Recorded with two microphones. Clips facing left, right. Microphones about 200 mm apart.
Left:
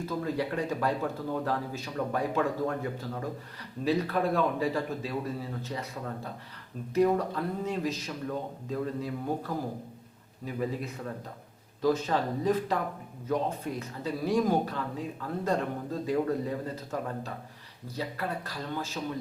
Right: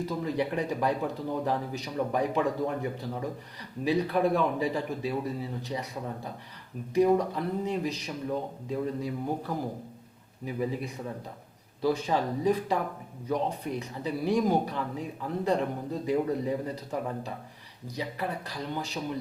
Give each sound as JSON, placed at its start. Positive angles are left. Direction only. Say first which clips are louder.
{"t": 0.0, "sound": "speech", "louder": "right 1 dB", "side_deg": -15}
{"t": 6.9, "sound": "speech", "louder": "right 2 dB", "side_deg": -15}